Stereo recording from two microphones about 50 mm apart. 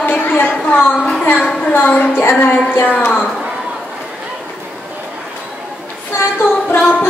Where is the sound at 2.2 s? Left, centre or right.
Left.